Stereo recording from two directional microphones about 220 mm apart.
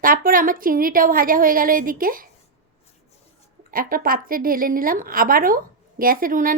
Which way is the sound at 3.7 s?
40° right (ahead or behind).